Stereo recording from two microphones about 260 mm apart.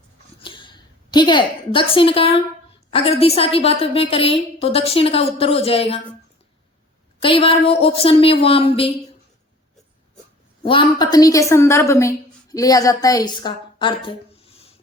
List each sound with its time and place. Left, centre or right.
0.4 s a sound: centre
2.9 s a woman's voice: left
7.2 s a woman's voice: left
10.6 s a woman's voice: centre